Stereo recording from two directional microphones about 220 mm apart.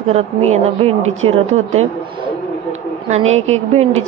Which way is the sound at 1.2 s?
30° right (ahead or behind).